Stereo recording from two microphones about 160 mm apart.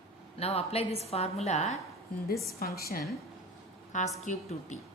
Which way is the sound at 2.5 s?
70° left (ahead or behind).